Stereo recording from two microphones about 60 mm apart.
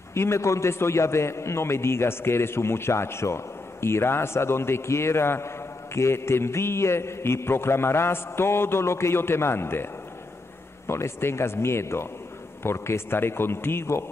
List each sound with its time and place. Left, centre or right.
0.1 s a man's voice: left
10.9 s a man's voice: left